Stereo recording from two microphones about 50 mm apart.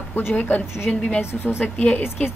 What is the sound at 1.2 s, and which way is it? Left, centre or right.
Speech, left.